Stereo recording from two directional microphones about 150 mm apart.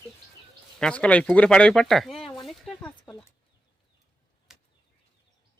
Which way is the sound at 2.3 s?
Centre (ahead or behind).